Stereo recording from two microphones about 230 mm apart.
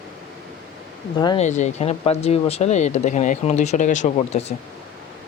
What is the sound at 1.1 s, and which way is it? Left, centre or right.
Speech, centre.